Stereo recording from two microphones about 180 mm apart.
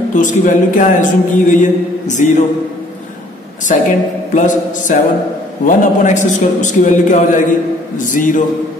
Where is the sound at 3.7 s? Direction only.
45° left (ahead or behind).